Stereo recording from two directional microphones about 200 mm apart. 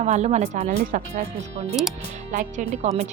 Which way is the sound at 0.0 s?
35° right (ahead or behind).